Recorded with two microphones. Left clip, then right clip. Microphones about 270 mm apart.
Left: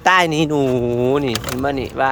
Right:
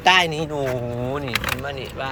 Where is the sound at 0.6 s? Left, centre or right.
Left.